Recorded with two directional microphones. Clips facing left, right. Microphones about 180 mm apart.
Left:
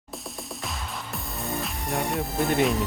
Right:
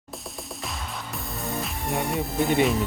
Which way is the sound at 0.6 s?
Centre (ahead or behind).